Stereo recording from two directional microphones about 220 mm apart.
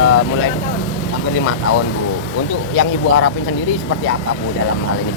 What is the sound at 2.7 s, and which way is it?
Speech, 85° left.